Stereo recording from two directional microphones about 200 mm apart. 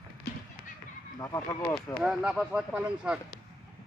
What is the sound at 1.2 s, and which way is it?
Speech, 15° left (ahead or behind).